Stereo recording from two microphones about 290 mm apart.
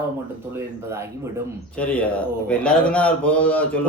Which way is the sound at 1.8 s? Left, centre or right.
Centre.